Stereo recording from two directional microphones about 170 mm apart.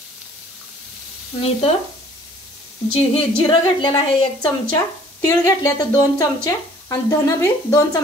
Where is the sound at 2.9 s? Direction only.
30° left (ahead or behind).